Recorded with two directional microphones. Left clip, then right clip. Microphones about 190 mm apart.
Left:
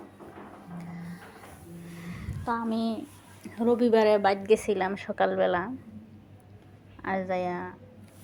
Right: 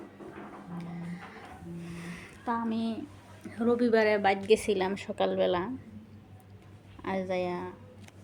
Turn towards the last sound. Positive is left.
turn(degrees=0)  # may be behind; listen again after turning